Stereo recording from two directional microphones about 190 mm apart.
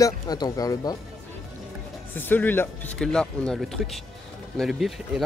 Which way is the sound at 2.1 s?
10° left (ahead or behind).